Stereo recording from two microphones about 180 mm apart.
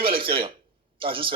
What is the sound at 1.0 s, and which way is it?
Speech, 30° right (ahead or behind).